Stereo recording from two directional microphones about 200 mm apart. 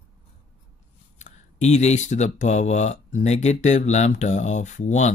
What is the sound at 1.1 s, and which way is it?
Speech, 35° left (ahead or behind).